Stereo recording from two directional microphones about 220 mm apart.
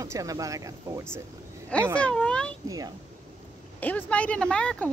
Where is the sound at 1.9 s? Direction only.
5° left (ahead or behind).